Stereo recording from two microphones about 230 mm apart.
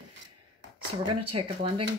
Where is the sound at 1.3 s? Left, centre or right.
Right.